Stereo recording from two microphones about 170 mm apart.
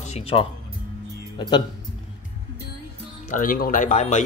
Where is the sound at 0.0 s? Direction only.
35° left (ahead or behind).